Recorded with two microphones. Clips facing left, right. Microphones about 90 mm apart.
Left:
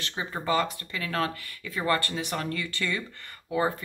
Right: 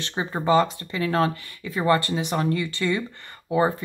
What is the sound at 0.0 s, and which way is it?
Speech, 30° right (ahead or behind).